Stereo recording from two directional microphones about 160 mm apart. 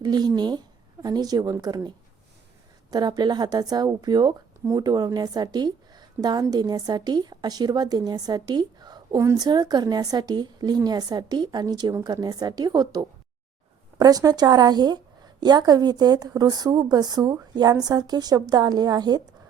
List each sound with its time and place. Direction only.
0.0 s a woman's voice: 25° right (ahead or behind)
2.9 s a woman's voice: 25° right (ahead or behind)